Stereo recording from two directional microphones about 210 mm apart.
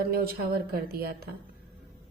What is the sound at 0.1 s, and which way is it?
A woman's voice, 45° right (ahead or behind).